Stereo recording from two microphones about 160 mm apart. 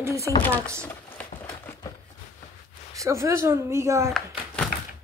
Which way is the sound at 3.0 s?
20° right (ahead or behind).